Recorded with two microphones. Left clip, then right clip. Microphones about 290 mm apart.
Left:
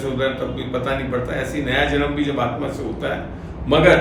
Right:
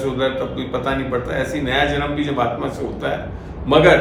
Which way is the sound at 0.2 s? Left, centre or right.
Centre.